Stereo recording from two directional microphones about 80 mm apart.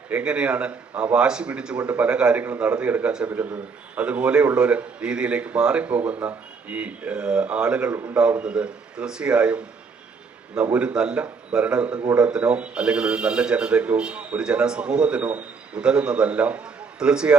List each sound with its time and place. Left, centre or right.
0.1 s speech: centre